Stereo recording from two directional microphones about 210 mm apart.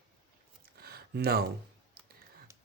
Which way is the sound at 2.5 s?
15° right (ahead or behind).